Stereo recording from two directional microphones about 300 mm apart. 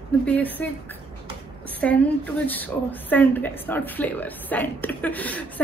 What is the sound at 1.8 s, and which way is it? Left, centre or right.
A woman's voice, centre.